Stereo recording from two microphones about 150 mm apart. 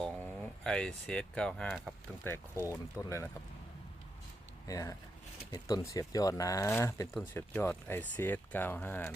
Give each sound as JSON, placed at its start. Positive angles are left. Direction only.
{"t": 0.6, "sound": "speech", "side_deg": 5}
{"t": 4.6, "sound": "speech", "side_deg": 20}